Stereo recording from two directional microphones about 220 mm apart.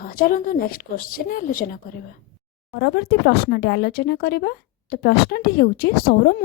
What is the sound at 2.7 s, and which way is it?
Speech, 50° left (ahead or behind).